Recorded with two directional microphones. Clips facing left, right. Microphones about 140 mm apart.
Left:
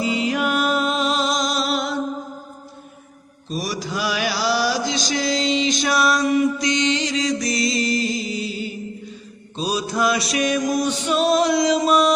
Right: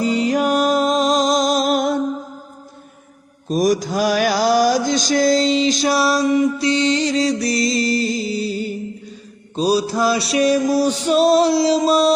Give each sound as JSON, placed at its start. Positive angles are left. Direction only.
{"t": 0.0, "sound": "music", "side_deg": -40}
{"t": 3.5, "sound": "mantra", "side_deg": -45}
{"t": 5.9, "sound": "mantra", "side_deg": -25}
{"t": 7.8, "sound": "music", "side_deg": -40}
{"t": 9.6, "sound": "mantra", "side_deg": -35}